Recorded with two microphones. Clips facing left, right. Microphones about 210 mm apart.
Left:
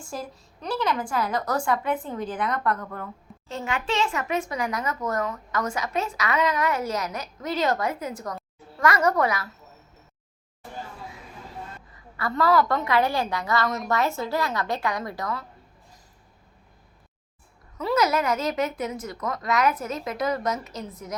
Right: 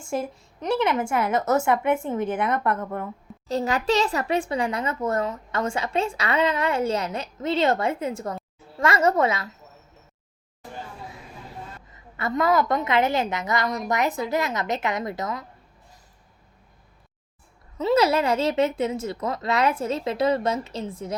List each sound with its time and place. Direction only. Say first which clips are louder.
0.0 s speech: right 7 dB; 25° right (ahead or behind)
3.5 s speech: right 6 dB; 40° right (ahead or behind)
11.9 s speech: right 1 dB; 20° right (ahead or behind)
13.7 s a woman's voice: right 1 dB; centre (ahead or behind)
13.9 s speech: right 2 dB; 15° right (ahead or behind)
17.7 s speech: right 3 dB; 25° right (ahead or behind)